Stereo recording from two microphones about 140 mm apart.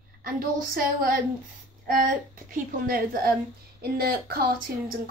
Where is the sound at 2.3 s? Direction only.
85° right.